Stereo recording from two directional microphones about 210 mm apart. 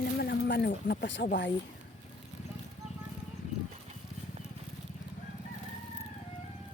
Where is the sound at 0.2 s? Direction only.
50° left (ahead or behind).